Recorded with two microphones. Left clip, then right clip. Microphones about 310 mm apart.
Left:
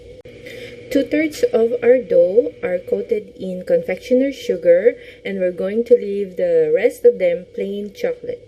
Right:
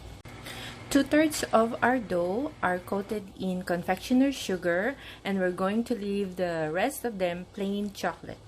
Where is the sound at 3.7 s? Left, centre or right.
Right.